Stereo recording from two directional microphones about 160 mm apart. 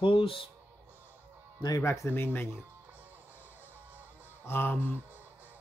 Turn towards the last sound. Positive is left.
turn(degrees=-10)  # may be behind; listen again after turning